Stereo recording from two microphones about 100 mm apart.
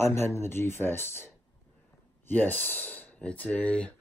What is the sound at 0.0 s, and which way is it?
Speech, 25° left (ahead or behind).